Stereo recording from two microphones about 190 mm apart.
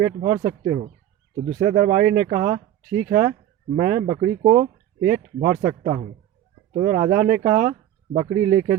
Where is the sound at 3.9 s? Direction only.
30° right (ahead or behind).